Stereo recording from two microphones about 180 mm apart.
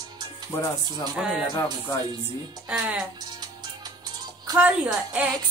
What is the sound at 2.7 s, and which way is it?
Speech, 5° right (ahead or behind).